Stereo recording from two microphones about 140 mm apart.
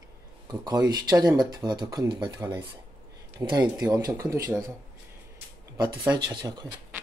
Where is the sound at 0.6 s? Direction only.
30° right (ahead or behind).